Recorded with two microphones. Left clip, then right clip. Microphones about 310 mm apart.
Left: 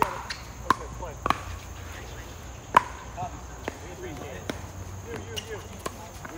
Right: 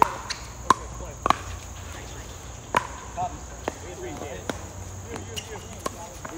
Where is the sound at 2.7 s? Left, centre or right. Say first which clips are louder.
Left 4 dB; centre.